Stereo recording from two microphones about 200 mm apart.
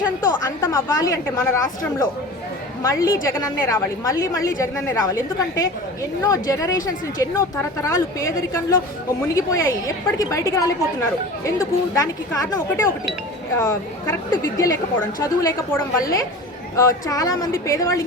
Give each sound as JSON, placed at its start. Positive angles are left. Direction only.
{"t": 0.4, "sound": "a woman's voice", "side_deg": 15}
{"t": 11.9, "sound": "a woman's voice", "side_deg": 15}